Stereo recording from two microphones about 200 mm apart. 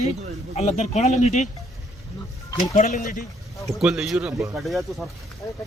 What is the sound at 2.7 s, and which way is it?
Speech, 40° left (ahead or behind).